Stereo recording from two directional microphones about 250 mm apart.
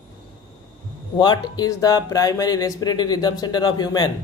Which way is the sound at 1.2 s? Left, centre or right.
Centre.